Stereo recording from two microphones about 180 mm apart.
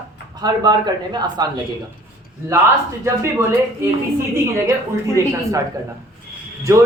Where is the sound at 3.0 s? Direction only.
15° right (ahead or behind).